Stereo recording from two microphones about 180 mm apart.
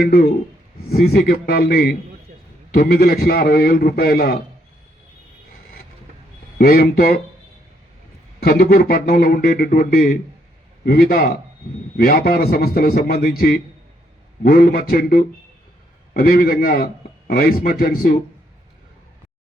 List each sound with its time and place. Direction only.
0.0 s a man's voice: 55° left (ahead or behind)
6.6 s a man's voice: 55° left (ahead or behind)
8.4 s a man's voice: 55° left (ahead or behind)